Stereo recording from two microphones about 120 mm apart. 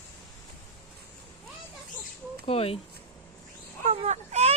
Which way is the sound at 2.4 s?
55° left (ahead or behind).